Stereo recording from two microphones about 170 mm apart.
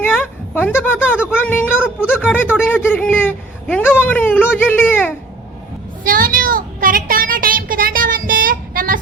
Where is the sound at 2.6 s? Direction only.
10° left (ahead or behind).